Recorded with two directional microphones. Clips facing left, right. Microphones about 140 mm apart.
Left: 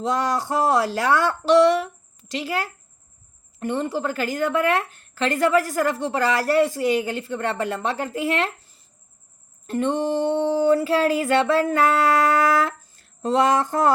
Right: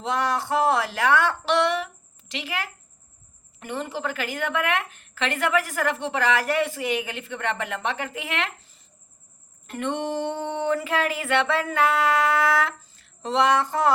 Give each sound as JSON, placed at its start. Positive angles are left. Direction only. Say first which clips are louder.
{"t": 0.0, "sound": "a woman's voice", "louder": "left 2 dB", "side_deg": 40}
{"t": 3.7, "sound": "a woman's voice", "louder": "left 5 dB", "side_deg": 40}
{"t": 9.6, "sound": "a woman's voice", "louder": "left 5 dB", "side_deg": 35}